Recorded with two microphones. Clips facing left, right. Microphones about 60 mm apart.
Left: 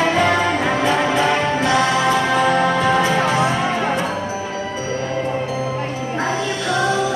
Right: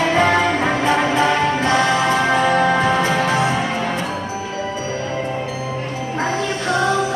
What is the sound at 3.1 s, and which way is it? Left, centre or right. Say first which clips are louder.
Music: left 1 dB; left.